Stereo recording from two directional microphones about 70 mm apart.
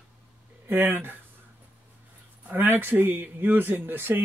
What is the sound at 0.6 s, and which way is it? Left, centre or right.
Speech, right.